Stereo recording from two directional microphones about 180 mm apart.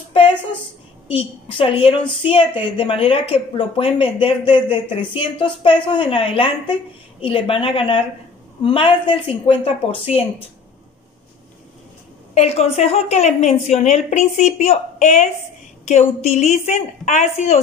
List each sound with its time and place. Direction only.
1.0 s a woman's voice: 30° left (ahead or behind)
12.4 s a woman's voice: 35° left (ahead or behind)